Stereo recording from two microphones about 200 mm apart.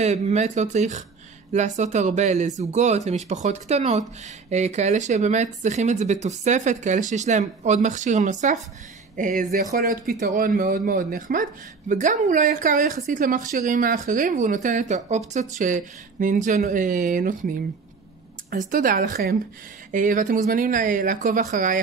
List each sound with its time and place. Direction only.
0.0 s speech: 35° right (ahead or behind)
18.5 s speech: 45° right (ahead or behind)